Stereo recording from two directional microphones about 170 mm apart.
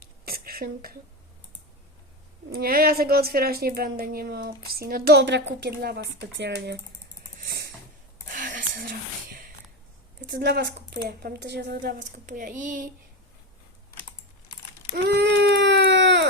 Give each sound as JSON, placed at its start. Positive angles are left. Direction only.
{"t": 0.0, "sound": "a sound", "side_deg": -65}
{"t": 2.5, "sound": "a woman's voice", "side_deg": -60}
{"t": 7.3, "sound": "a sound", "side_deg": -60}
{"t": 8.3, "sound": "whispering", "side_deg": -50}
{"t": 10.2, "sound": "speech", "side_deg": -70}
{"t": 11.2, "sound": "a woman's voice", "side_deg": -75}
{"t": 15.0, "sound": "baby cry", "side_deg": -75}